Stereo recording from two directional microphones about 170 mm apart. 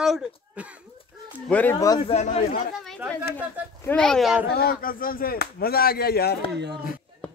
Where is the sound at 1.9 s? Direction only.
30° left (ahead or behind).